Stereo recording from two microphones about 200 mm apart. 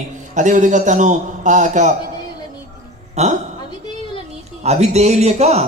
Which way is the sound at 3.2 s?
35° right (ahead or behind).